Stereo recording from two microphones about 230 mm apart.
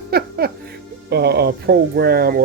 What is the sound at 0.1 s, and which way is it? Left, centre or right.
Music, right.